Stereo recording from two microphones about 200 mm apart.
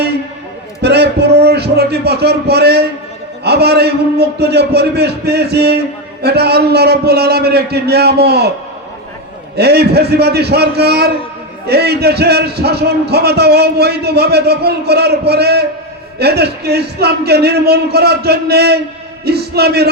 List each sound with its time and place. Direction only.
0.8 s music: 55° right (ahead or behind)
3.4 s a man's voice: 55° right (ahead or behind)
9.6 s a man's voice: 55° right (ahead or behind)